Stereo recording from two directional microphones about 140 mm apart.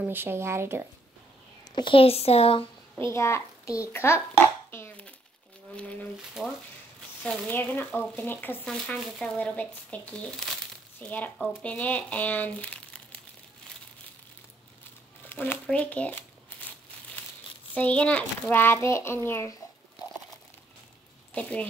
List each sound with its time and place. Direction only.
0.0 s speech: 15° right (ahead or behind)
1.6 s speech: 35° left (ahead or behind)
3.0 s a child's voice: 20° left (ahead or behind)
4.6 s a sound: 15° left (ahead or behind)
6.4 s speech: 5° right (ahead or behind)
7.2 s speech: 10° left (ahead or behind)
15.2 s speech: 15° left (ahead or behind)
15.6 s crumpling: 10° left (ahead or behind)
17.7 s speech: 10° left (ahead or behind)
21.3 s speech: 10° left (ahead or behind)